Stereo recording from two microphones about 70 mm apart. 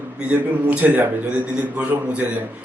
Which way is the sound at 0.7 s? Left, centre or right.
Right.